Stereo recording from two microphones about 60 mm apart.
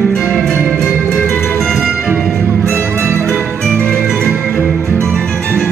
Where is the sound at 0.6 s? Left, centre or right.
Right.